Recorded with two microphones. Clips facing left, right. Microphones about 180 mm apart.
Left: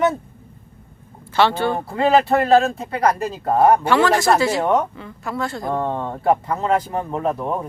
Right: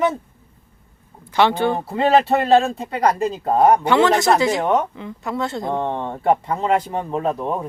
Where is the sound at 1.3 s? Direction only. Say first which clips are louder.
Right 1 dB; 15° right (ahead or behind).